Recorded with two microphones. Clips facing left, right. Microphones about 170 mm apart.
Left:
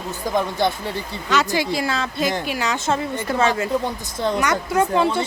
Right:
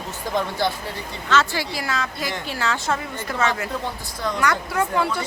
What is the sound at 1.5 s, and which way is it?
Speech, 25° left (ahead or behind).